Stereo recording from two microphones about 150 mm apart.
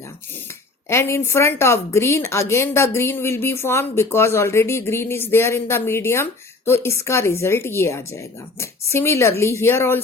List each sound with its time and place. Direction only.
0.9 s a woman's voice: 15° left (ahead or behind)